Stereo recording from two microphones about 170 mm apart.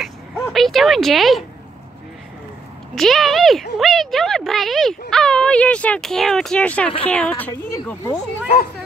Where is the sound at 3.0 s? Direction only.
Centre (ahead or behind).